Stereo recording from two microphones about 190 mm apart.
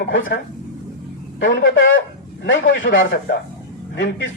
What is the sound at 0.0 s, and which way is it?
Speech, 90° left.